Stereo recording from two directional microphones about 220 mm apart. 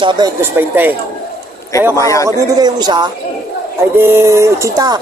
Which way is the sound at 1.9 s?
15° left (ahead or behind).